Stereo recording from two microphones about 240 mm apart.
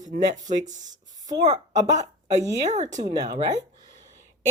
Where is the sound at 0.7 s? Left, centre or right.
Right.